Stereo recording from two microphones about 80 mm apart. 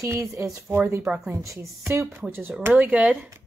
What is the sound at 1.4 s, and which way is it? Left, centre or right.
Speech, right.